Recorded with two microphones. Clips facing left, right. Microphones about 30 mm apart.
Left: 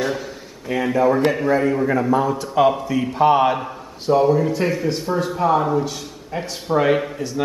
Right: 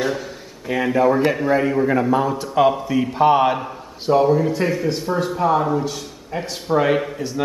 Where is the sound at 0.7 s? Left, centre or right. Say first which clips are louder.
Right 1 dB; centre.